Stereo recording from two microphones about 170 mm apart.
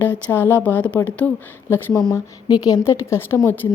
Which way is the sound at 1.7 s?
20° left (ahead or behind).